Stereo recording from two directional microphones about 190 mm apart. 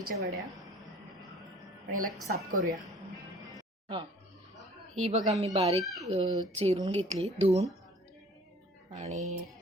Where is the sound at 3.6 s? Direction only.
25° right (ahead or behind).